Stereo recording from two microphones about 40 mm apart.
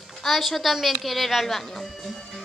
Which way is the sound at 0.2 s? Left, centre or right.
Centre.